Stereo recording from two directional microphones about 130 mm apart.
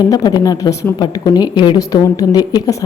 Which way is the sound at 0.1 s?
30° left (ahead or behind).